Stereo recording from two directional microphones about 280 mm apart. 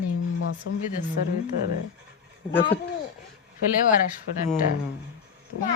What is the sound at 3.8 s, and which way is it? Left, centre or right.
Speech, left.